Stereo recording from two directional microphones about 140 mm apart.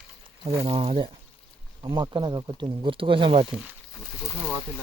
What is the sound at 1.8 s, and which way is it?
Speech, 30° right (ahead or behind).